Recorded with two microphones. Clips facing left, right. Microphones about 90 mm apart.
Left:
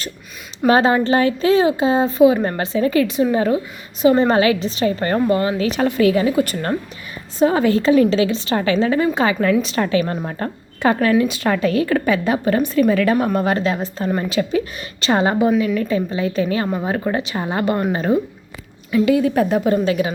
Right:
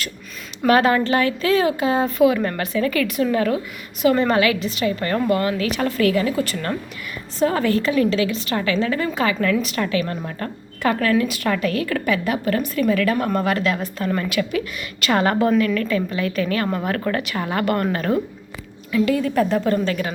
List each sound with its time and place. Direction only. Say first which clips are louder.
0.7 s a woman's voice: left 2 dB; 25° left (ahead or behind)
6.5 s speech: left 3 dB; 35° left (ahead or behind)
7.3 s a woman's voice: left 4 dB; 20° left (ahead or behind)
13.5 s a woman's voice: left 2 dB; 30° left (ahead or behind); by 16.0 s 15° left (ahead or behind)
16.0 s a woman's voice: left 2 dB; 25° left (ahead or behind)